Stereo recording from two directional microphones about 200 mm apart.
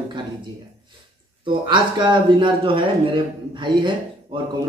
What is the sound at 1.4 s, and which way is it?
Speech, 25° right (ahead or behind).